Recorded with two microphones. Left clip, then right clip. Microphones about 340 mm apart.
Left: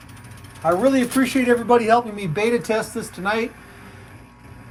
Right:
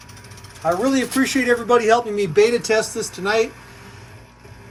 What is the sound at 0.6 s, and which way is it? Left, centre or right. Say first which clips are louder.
Speech: left 1 dB; centre.